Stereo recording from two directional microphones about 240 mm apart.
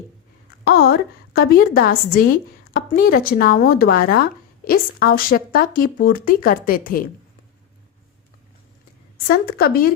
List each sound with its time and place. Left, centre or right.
0.6 s speech: left
9.1 s speech: left